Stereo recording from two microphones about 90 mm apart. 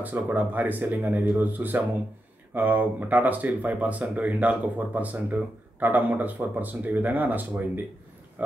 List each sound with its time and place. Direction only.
0.0 s speech: 20° right (ahead or behind)